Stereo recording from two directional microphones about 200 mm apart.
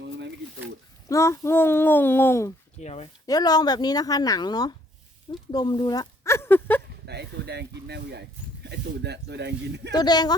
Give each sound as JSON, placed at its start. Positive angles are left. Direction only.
{"t": 1.0, "sound": "a child's voice", "side_deg": 15}
{"t": 2.8, "sound": "speech", "side_deg": 30}
{"t": 3.2, "sound": "speech", "side_deg": 20}
{"t": 5.3, "sound": "a sound", "side_deg": 20}
{"t": 7.0, "sound": "speech", "side_deg": -55}
{"t": 9.9, "sound": "speech", "side_deg": 20}